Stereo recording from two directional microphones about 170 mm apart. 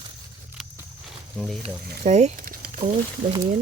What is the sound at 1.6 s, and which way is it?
Speech, 40° right (ahead or behind).